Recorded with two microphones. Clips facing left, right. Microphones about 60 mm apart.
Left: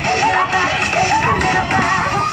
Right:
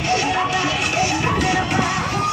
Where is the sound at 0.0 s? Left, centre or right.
Left.